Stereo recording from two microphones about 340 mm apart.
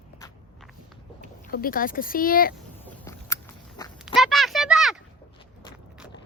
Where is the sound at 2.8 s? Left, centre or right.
Centre.